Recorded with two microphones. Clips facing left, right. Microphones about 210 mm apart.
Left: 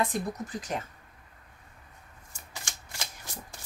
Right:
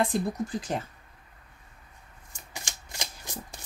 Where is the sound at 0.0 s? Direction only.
30° right (ahead or behind).